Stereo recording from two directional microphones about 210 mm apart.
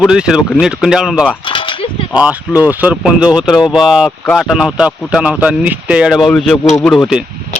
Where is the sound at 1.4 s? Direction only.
25° left (ahead or behind).